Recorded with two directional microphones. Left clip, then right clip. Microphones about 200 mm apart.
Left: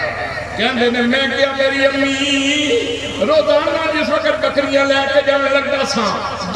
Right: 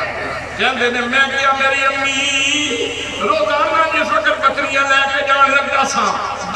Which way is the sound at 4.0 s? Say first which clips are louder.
Right 1 dB; 25° left (ahead or behind).